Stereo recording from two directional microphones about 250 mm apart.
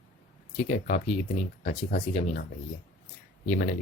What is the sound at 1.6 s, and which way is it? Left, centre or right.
Speech, left.